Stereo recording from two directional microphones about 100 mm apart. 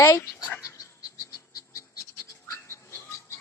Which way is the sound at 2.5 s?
30° left (ahead or behind).